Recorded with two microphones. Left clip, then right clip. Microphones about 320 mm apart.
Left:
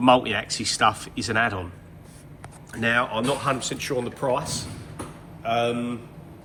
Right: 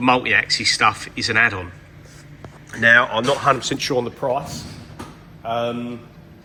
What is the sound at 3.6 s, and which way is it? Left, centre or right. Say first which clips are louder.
Speech: right 6 dB; right.